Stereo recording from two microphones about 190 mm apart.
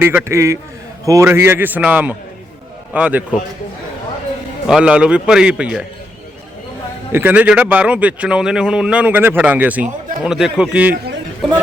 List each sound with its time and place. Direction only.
0.0 s speech: 10° right (ahead or behind)
4.6 s a man's voice: 5° right (ahead or behind)
7.1 s speech: 10° right (ahead or behind)